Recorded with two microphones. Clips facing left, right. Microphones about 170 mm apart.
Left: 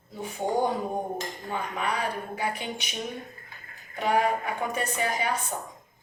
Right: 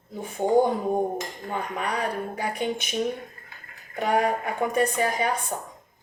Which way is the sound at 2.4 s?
45° right (ahead or behind).